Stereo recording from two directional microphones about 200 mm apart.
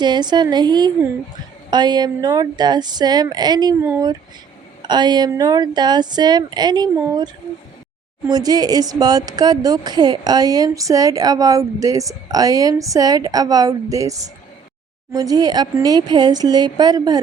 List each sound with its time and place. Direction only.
0.0 s a woman's voice: 20° right (ahead or behind)
8.3 s a woman's voice: 20° right (ahead or behind)